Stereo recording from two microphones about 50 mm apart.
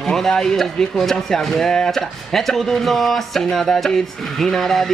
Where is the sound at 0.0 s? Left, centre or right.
Centre.